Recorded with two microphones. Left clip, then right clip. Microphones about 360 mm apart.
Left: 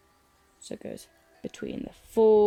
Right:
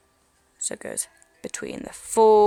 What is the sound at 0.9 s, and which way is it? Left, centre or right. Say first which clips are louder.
Speech: right 6 dB; centre.